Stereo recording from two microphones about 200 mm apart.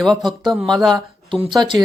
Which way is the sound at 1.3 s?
25° right (ahead or behind).